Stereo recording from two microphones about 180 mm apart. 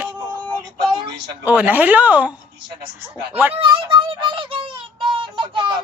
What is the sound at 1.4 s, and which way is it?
Speech, 10° right (ahead or behind).